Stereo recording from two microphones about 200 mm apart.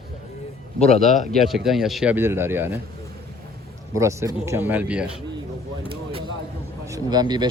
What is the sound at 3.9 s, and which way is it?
Speech, 15° right (ahead or behind).